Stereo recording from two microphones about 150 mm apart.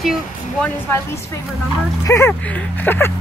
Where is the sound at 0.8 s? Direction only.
15° left (ahead or behind).